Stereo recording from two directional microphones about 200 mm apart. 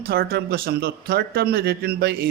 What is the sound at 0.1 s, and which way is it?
A man's voice, 50° right (ahead or behind).